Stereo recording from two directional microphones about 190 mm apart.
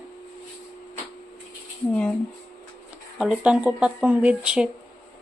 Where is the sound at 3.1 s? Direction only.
5° right (ahead or behind).